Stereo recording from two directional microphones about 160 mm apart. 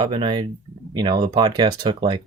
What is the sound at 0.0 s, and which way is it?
Speech, 30° right (ahead or behind).